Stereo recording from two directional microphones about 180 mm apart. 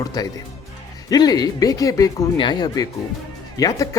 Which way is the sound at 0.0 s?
20° left (ahead or behind).